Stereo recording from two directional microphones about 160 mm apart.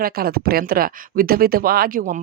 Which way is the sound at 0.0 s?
70° right (ahead or behind).